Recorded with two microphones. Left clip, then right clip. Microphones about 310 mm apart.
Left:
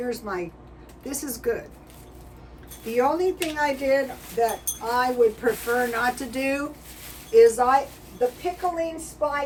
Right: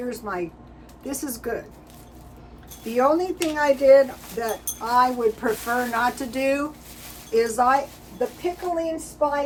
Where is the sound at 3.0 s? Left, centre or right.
Centre.